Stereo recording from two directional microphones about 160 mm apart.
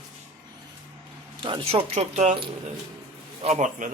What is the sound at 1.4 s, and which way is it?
A man's voice, 35° right (ahead or behind).